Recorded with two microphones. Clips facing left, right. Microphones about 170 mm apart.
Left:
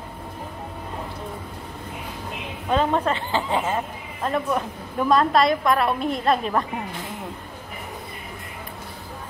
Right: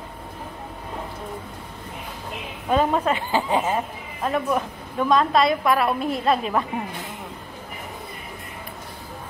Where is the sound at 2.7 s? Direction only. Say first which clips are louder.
Right 1 dB; 10° right (ahead or behind).